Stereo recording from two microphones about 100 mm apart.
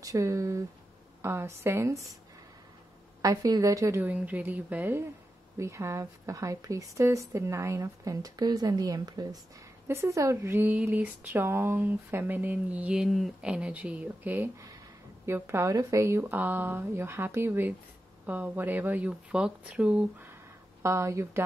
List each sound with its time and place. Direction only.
0.0 s a woman's voice: 35° right (ahead or behind)
3.2 s a woman's voice: 35° right (ahead or behind)
4.0 s speech: 15° right (ahead or behind)
5.6 s a woman's voice: 30° right (ahead or behind)
9.8 s speech: 30° right (ahead or behind); by 20.2 s 10° right (ahead or behind)
20.8 s speech: 30° right (ahead or behind)